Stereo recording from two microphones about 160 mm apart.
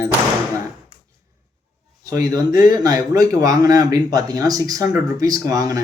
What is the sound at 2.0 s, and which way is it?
Speech, 20° right (ahead or behind).